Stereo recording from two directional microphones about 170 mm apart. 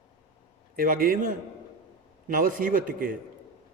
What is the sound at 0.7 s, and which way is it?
Speech, 55° right (ahead or behind).